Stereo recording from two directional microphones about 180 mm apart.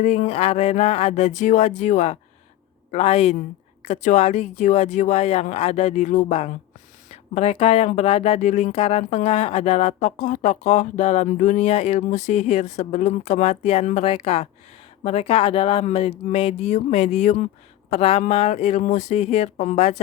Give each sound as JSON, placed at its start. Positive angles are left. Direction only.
{"t": 0.0, "sound": "speech", "side_deg": 40}